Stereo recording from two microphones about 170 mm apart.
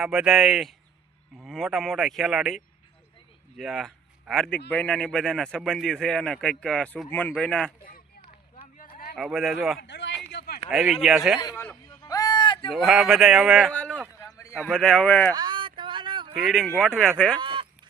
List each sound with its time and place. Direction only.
0.0 s a man's voice: 5° right (ahead or behind)
3.6 s a man's voice: centre (ahead or behind)
8.8 s a sound: 55° left (ahead or behind)
9.1 s a man's voice: centre (ahead or behind)
9.8 s a man's voice: 90° left
10.3 s a sound: 65° left (ahead or behind)
10.7 s a man's voice: centre (ahead or behind)
11.3 s a man's voice: 20° left (ahead or behind)
12.0 s a sound: 20° left (ahead or behind)
12.7 s a man's voice: centre (ahead or behind)
15.4 s a sound: 25° right (ahead or behind)
16.3 s a man's voice: centre (ahead or behind)
17.4 s honk: 30° right (ahead or behind)